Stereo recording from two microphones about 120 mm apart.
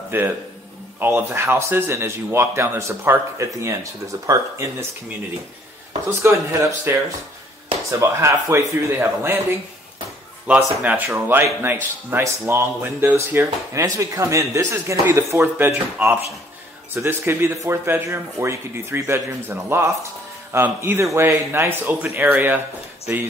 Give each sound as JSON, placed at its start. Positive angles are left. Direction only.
{"t": 0.1, "sound": "speech", "side_deg": -15}
{"t": 6.0, "sound": "speech", "side_deg": -20}
{"t": 8.0, "sound": "speech", "side_deg": -25}
{"t": 10.5, "sound": "a man's voice", "side_deg": -15}